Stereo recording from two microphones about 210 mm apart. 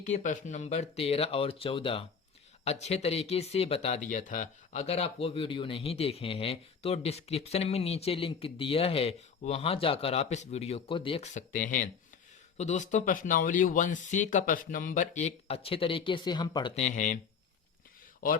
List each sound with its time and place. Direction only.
0.0 s speech: 35° left (ahead or behind); by 16.7 s 20° left (ahead or behind)
16.7 s speech: 35° left (ahead or behind)